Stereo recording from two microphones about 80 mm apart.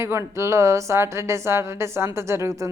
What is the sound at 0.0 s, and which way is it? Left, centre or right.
A woman's voice, right.